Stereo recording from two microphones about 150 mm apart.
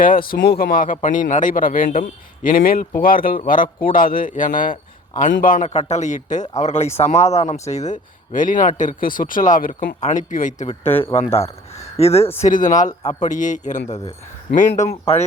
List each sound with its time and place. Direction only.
0.0 s speech: 70° left (ahead or behind); by 12.3 s 45° left (ahead or behind)
12.4 s speech: 60° left (ahead or behind)